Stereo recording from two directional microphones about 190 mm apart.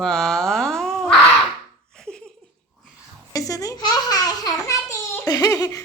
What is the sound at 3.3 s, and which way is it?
Speech, 20° left (ahead or behind).